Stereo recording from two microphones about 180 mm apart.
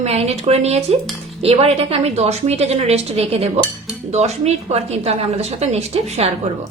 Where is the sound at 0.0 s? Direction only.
35° right (ahead or behind).